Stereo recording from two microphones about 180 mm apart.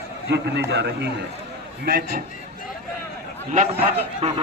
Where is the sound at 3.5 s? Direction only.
35° right (ahead or behind).